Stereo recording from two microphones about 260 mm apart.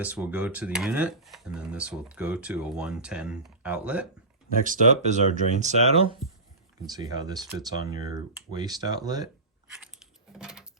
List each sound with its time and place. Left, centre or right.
0.0 s speech: centre
4.6 s speech: right
9.7 s a sound: centre